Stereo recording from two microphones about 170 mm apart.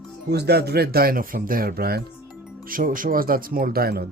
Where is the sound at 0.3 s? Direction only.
75° right (ahead or behind).